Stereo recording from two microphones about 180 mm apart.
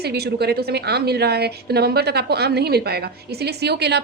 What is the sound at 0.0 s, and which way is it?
A woman's voice, 65° right (ahead or behind).